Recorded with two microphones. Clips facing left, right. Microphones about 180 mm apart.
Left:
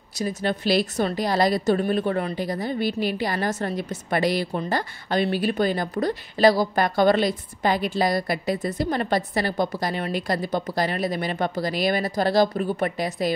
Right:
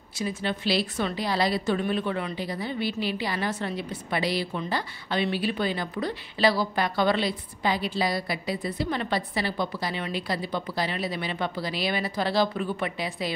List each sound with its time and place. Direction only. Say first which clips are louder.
0.1 s a woman's voice: left 4 dB; 40° left (ahead or behind)